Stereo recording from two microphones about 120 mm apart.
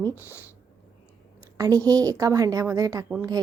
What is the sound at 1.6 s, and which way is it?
A woman's voice, 30° right (ahead or behind).